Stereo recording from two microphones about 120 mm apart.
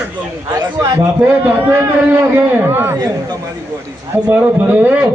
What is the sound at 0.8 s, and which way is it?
Speech, 25° right (ahead or behind).